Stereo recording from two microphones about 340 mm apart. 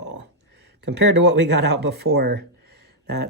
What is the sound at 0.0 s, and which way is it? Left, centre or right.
Speech, right.